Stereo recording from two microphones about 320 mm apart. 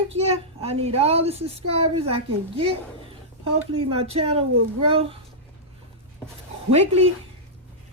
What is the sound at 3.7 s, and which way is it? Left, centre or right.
A child's voice, centre.